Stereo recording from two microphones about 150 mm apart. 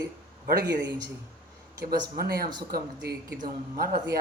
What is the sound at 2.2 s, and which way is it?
Speech, 90° right.